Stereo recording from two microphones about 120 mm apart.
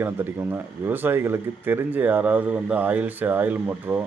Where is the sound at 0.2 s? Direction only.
15° right (ahead or behind).